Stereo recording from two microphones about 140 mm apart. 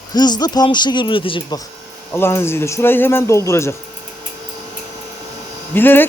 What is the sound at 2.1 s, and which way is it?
Speech, 15° left (ahead or behind).